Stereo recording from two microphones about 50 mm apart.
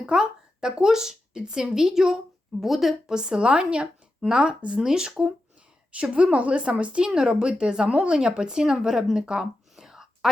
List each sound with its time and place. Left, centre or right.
0.0 s speech: centre
3.2 s speech: centre
5.9 s speech: right
9.1 s a sound: centre